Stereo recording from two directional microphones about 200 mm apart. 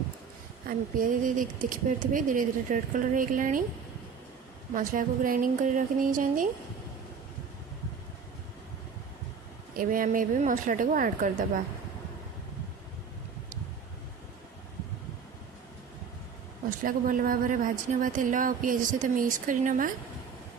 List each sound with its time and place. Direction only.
0.7 s speech: 45° right (ahead or behind)
4.7 s speech: 40° right (ahead or behind)
9.7 s speech: 45° right (ahead or behind)
16.6 s speech: 45° right (ahead or behind)